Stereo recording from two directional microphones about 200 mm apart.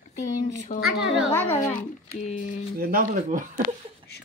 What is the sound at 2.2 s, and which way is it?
Speech, 40° left (ahead or behind).